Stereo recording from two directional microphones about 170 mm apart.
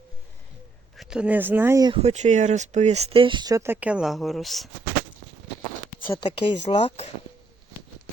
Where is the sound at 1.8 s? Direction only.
30° right (ahead or behind); by 4.7 s centre (ahead or behind).